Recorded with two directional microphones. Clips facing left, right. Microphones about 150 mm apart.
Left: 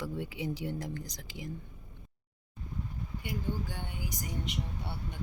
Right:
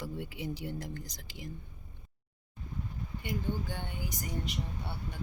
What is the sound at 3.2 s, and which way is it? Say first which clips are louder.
Speech: right 1 dB; 10° left (ahead or behind).